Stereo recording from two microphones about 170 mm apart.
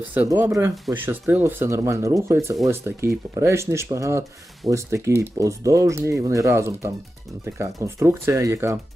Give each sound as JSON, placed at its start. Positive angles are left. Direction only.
{"t": 0.0, "sound": "speech", "side_deg": -10}